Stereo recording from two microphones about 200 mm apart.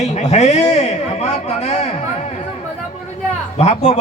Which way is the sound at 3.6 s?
35° left (ahead or behind).